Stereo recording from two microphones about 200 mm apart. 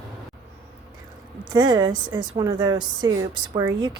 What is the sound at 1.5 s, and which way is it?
Speech, 20° right (ahead or behind).